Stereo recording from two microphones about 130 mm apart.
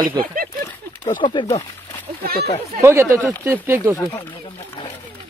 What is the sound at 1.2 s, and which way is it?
Speech, 40° left (ahead or behind).